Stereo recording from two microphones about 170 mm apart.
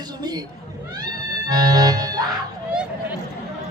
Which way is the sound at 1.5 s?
20° right (ahead or behind).